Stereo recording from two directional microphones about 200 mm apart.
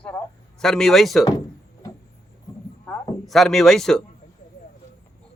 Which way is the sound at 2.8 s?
5° left (ahead or behind).